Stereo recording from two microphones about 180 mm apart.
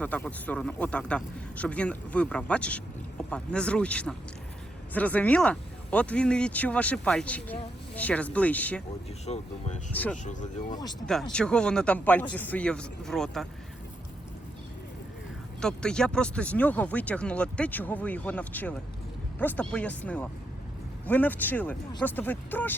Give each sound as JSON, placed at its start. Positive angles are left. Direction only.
{"t": 0.0, "sound": "speech", "side_deg": 10}
{"t": 9.2, "sound": "speech", "side_deg": 40}
{"t": 9.9, "sound": "speech", "side_deg": 10}
{"t": 10.2, "sound": "speech", "side_deg": 40}
{"t": 11.0, "sound": "speech", "side_deg": 5}
{"t": 15.6, "sound": "speech", "side_deg": 5}